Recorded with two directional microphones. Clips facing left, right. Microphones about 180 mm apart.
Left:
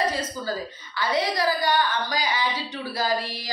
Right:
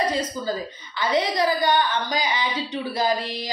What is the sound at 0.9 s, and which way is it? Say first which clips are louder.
Speech: right 2 dB; 20° right (ahead or behind).